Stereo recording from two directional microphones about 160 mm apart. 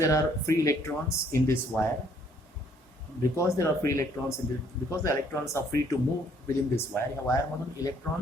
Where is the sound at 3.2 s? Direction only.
20° left (ahead or behind).